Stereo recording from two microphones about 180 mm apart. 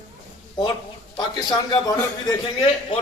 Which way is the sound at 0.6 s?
25° left (ahead or behind).